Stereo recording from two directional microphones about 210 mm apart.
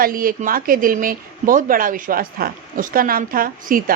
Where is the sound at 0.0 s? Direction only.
40° right (ahead or behind).